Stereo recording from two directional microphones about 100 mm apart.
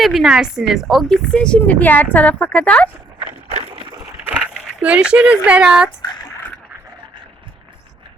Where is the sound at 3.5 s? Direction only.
90° right.